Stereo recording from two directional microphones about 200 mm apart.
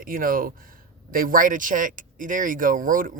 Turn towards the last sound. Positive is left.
turn(degrees=-40)  # may be behind; listen again after turning